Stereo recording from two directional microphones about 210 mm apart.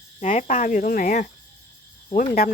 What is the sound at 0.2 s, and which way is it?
Speech, 35° left (ahead or behind).